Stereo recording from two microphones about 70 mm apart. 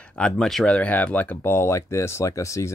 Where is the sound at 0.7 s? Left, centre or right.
Centre.